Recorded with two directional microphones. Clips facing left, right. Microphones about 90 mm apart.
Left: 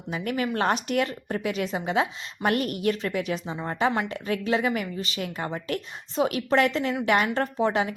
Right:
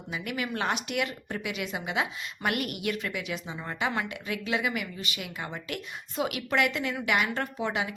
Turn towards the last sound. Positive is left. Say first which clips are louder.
# left 6 dB
turn(degrees=35)  # may be behind; listen again after turning